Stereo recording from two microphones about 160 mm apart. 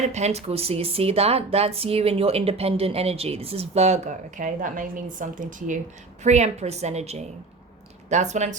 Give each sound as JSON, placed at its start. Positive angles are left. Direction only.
{"t": 0.1, "sound": "a woman's voice", "side_deg": -45}